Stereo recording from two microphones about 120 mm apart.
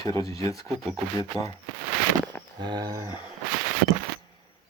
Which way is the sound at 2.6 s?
35° right (ahead or behind).